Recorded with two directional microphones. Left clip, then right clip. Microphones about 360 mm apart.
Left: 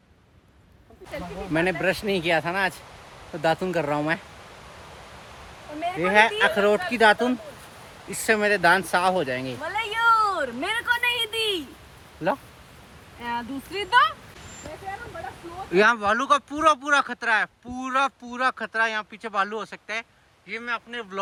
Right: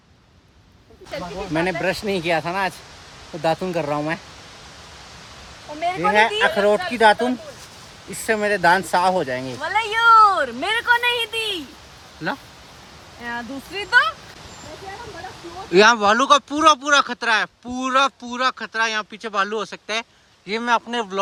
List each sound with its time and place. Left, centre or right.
1.5 s speech: centre
6.0 s speech: centre
9.6 s a sound: right
10.8 s a sound: centre
13.2 s speech: centre
15.7 s speech: centre